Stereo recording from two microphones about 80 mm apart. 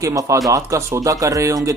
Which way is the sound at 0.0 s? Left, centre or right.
Right.